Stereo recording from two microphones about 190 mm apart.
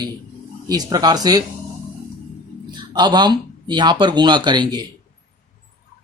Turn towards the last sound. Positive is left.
turn(degrees=-25)  # may be behind; listen again after turning